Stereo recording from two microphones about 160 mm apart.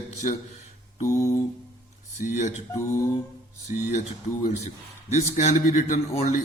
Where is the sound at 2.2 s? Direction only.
50° left (ahead or behind).